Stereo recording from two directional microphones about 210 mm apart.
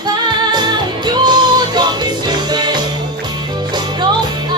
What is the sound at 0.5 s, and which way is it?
Music, 20° right (ahead or behind).